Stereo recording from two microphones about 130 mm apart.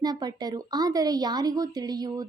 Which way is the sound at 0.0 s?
30° right (ahead or behind).